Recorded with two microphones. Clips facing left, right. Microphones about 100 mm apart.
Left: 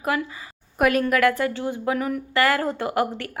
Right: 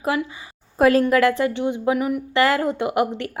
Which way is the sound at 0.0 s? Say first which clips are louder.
Right 2 dB; 25° right (ahead or behind).